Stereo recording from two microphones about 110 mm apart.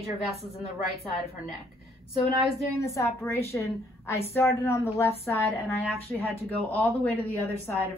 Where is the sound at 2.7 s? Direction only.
25° left (ahead or behind).